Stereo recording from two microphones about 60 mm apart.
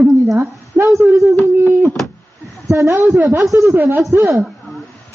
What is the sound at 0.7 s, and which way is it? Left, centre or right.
Speech, right.